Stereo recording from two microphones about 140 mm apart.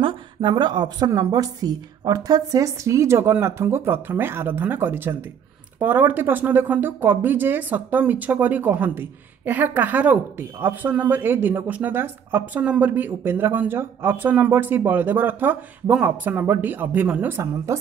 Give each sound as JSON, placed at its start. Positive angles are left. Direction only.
{"t": 0.0, "sound": "a woman's voice", "side_deg": -35}